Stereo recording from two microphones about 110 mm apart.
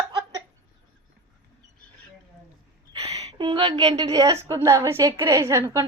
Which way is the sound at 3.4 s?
50° right (ahead or behind).